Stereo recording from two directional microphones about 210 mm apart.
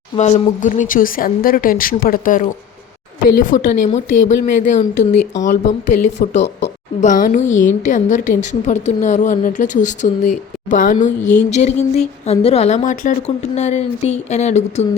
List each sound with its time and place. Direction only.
0.2 s a woman's voice: 35° left (ahead or behind)
4.5 s a woman's voice: 35° left (ahead or behind)